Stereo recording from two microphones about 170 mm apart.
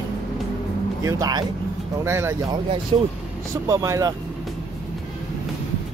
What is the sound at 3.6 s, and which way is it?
Speech, 20° right (ahead or behind).